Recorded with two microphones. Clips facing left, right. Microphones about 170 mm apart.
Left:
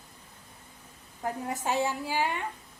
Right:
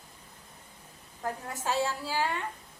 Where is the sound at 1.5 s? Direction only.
20° left (ahead or behind).